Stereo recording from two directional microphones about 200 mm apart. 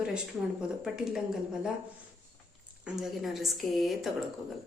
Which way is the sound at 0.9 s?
Centre (ahead or behind).